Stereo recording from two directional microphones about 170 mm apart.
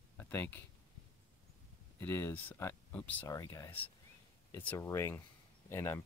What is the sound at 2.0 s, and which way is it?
Speech, 15° left (ahead or behind).